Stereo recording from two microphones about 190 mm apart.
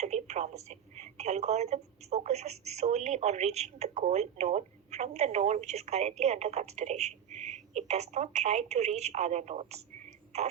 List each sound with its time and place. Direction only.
0.0 s a woman's voice: 35° right (ahead or behind)
10.3 s throat clearing: 35° right (ahead or behind)